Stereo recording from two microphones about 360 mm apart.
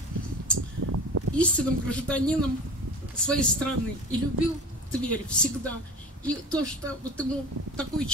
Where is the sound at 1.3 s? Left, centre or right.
Centre.